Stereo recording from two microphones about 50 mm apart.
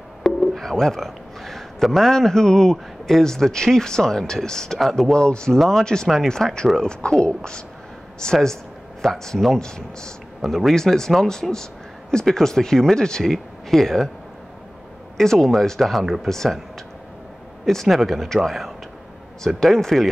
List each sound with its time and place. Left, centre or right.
0.2 s busy signal: centre
0.6 s a man's voice: centre
10.4 s a man's voice: centre
15.1 s speech: centre
17.6 s a man's voice: centre